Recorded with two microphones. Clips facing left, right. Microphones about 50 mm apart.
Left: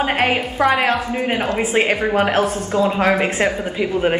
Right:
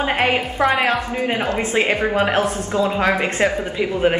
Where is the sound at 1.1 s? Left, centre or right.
Centre.